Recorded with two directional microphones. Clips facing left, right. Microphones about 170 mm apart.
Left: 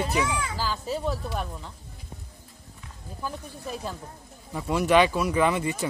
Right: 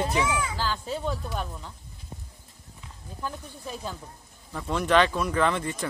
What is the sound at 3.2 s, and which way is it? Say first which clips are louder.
Speech: left 1 dB; centre (ahead or behind).